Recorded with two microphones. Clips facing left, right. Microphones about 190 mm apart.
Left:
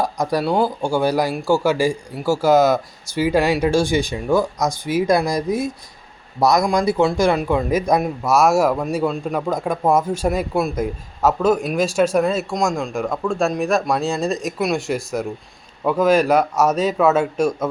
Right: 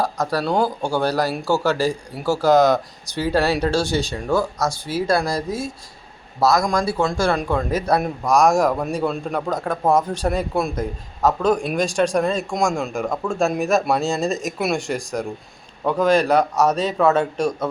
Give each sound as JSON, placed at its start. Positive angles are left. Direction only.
{"t": 0.0, "sound": "a man's voice", "side_deg": 15}